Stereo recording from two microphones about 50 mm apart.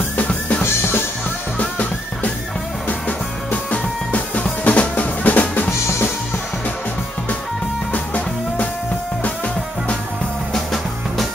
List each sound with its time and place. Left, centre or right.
0.2 s drum: left
1.6 s music: left
5.7 s music: left
7.9 s music: left
10.5 s music: centre